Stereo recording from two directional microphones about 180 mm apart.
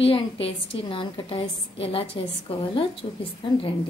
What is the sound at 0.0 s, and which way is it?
A woman's voice, 30° left (ahead or behind).